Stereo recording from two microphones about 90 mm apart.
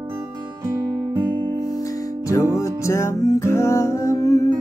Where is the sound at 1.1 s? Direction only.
60° right (ahead or behind).